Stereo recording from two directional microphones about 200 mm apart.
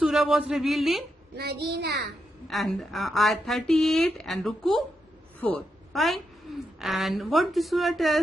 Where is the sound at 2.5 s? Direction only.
Centre (ahead or behind).